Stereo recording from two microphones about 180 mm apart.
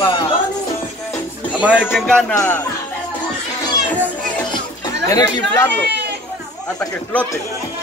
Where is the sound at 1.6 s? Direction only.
5° right (ahead or behind); by 2.6 s 10° left (ahead or behind).